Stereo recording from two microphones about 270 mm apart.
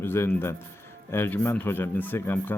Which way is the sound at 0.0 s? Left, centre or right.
Centre.